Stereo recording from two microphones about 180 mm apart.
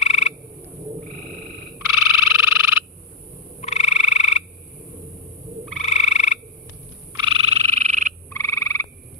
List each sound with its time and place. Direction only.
0.0 s frog: 35° left (ahead or behind)
1.9 s frog: 15° right (ahead or behind)
3.6 s frog: 35° left (ahead or behind)
5.8 s frog: 35° left (ahead or behind)
7.2 s frog: 30° right (ahead or behind)
8.3 s frog: 15° left (ahead or behind)